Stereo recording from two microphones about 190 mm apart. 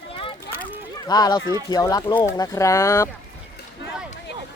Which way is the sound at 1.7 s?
20° left (ahead or behind).